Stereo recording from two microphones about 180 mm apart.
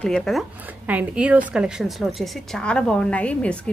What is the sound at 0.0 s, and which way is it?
A woman's voice, 5° left (ahead or behind).